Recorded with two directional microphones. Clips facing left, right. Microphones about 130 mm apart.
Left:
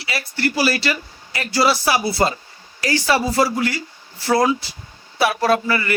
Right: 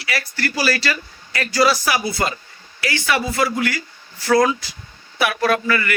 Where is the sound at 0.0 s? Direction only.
25° left (ahead or behind).